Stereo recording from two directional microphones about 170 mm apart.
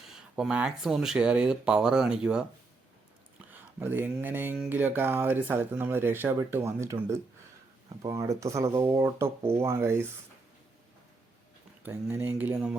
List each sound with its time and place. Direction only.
0.1 s speech: centre (ahead or behind)
11.8 s speech: 10° right (ahead or behind)